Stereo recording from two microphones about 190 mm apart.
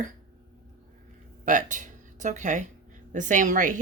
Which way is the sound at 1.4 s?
45° right (ahead or behind).